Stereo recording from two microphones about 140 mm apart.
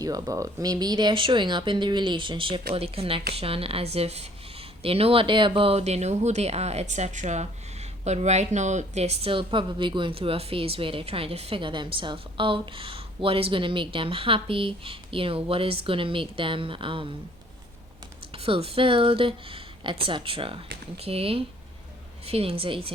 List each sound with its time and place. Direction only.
0.0 s speech: 25° right (ahead or behind)
18.4 s speech: 40° right (ahead or behind)